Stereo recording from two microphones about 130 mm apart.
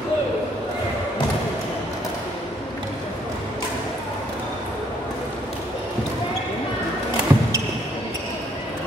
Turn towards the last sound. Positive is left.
turn(degrees=-15)  # may be behind; listen again after turning